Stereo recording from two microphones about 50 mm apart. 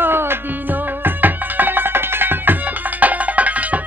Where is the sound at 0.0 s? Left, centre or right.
Right.